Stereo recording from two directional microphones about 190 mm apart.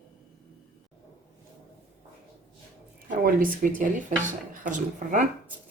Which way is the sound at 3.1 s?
45° right (ahead or behind).